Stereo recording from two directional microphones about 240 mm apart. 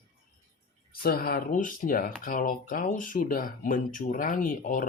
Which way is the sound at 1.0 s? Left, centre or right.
Left.